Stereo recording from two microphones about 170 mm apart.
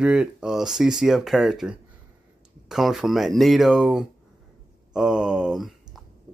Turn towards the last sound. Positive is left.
turn(degrees=0)  # may be behind; listen again after turning